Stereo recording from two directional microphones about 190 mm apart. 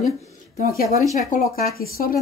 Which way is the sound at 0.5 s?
50° left (ahead or behind).